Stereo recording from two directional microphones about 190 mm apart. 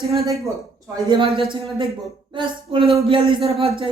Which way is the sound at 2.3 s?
25° right (ahead or behind).